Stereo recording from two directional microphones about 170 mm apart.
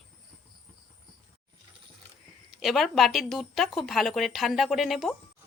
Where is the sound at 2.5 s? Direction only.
Centre (ahead or behind).